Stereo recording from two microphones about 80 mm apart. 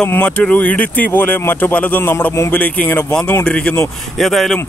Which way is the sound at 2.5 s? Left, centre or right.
Left.